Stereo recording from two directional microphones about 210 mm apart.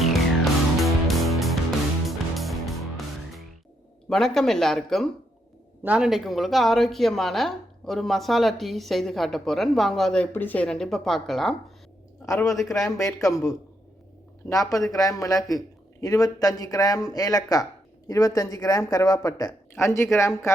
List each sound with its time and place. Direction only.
0.8 s music: centre (ahead or behind)
4.1 s a woman's voice: centre (ahead or behind)
12.3 s a man's voice: 15° left (ahead or behind)